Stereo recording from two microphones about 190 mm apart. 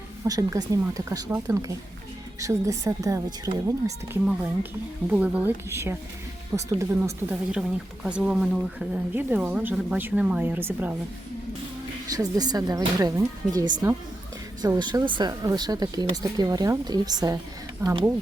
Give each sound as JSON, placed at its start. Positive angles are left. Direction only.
{"t": 0.3, "sound": "speech", "side_deg": -20}
{"t": 12.1, "sound": "speech", "side_deg": -20}